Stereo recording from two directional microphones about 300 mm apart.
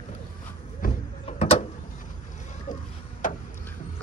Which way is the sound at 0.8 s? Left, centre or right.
Left.